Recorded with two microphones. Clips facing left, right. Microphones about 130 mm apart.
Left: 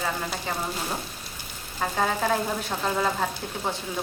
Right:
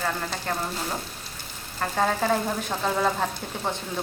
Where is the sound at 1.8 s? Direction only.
Centre (ahead or behind).